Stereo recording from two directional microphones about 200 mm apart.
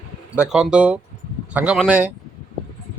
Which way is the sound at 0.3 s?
5° right (ahead or behind).